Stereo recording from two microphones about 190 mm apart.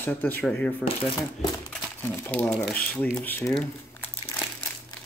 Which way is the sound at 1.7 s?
10° left (ahead or behind).